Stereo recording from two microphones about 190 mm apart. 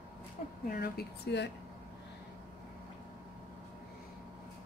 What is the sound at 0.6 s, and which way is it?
Speech, 55° left (ahead or behind).